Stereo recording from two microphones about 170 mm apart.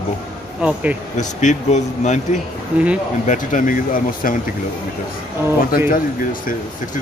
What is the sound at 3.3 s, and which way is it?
Speech, 50° left (ahead or behind).